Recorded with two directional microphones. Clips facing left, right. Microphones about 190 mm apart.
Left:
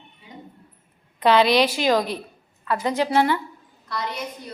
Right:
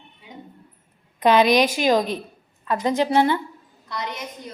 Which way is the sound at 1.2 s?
15° right (ahead or behind).